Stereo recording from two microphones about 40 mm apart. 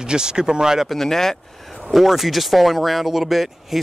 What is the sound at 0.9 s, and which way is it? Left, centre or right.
Speech, centre.